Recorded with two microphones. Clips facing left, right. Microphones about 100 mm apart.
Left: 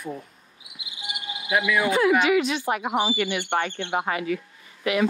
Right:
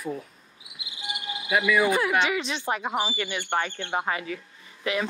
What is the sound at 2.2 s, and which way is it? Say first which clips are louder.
Speech: left 7 dB; 25° right (ahead or behind).